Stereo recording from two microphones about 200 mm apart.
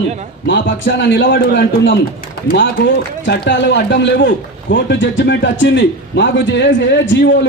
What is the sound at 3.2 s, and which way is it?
A man's voice, 60° left (ahead or behind).